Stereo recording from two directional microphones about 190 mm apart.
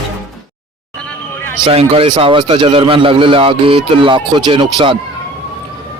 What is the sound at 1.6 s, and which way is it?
Speech, 30° right (ahead or behind).